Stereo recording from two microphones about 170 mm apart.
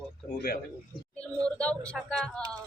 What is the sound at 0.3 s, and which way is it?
Speech, 65° left (ahead or behind).